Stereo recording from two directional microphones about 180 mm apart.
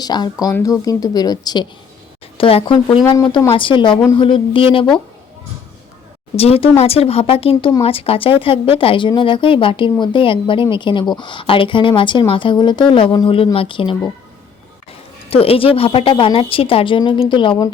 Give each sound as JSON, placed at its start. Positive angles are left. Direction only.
{"t": 0.0, "sound": "speech", "side_deg": 20}
{"t": 6.3, "sound": "speech", "side_deg": 35}
{"t": 15.3, "sound": "speech", "side_deg": 30}